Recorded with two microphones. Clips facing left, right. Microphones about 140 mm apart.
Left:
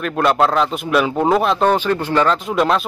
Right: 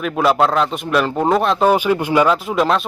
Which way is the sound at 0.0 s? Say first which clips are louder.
Even; 5° right (ahead or behind).